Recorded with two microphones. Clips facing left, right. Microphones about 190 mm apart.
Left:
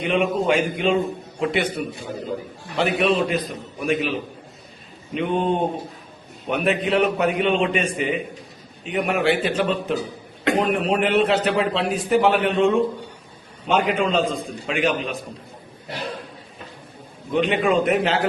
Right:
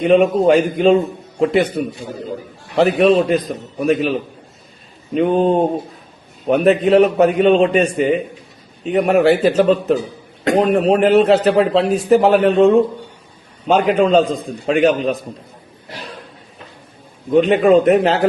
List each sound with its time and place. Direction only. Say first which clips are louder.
0.0 s a man's voice: right 9 dB; 40° right (ahead or behind)
17.3 s a man's voice: right 8 dB; 40° right (ahead or behind)